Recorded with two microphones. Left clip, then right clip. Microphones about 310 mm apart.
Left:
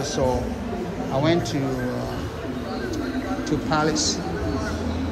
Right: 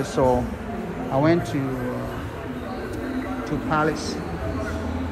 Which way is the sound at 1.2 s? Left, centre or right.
Centre.